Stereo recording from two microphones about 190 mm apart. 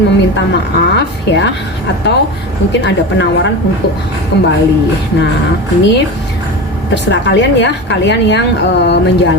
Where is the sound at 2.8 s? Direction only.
70° left (ahead or behind).